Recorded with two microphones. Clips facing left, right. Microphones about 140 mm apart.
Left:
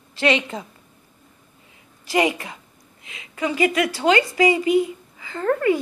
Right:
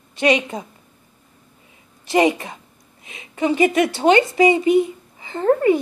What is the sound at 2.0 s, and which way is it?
A woman's voice, 25° right (ahead or behind).